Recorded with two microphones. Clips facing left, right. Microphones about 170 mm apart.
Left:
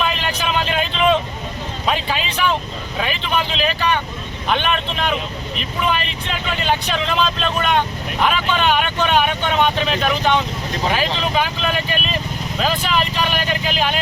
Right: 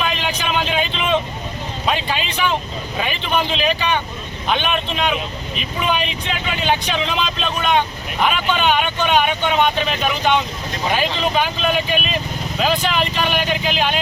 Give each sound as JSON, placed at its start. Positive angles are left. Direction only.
{"t": 0.0, "sound": "vehicle", "side_deg": 5}
{"t": 1.9, "sound": "a sound", "side_deg": 0}
{"t": 3.0, "sound": "speech", "side_deg": 0}